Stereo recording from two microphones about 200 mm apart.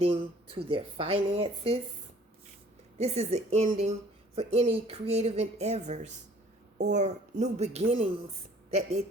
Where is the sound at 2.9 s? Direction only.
35° right (ahead or behind).